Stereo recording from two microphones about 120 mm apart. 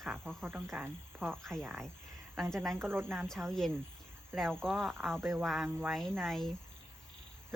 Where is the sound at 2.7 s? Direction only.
20° right (ahead or behind).